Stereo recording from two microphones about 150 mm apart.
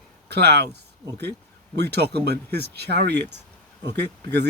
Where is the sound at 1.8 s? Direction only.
90° right.